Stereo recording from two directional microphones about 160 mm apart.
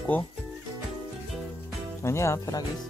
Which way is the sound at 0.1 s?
10° left (ahead or behind).